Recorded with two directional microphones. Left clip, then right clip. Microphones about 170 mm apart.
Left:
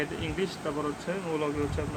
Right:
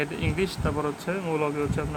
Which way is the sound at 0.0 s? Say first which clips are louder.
Right 4 dB; 50° right (ahead or behind).